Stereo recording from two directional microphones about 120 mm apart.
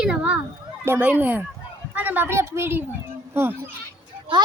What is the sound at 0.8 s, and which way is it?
A woman's voice, 15° right (ahead or behind).